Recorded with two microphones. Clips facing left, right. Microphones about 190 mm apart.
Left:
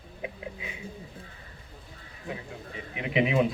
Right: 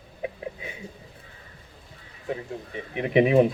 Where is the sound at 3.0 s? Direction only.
45° right (ahead or behind).